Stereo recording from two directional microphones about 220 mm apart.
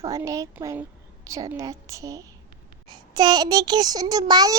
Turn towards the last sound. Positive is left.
turn(degrees=-15)  # may be behind; listen again after turning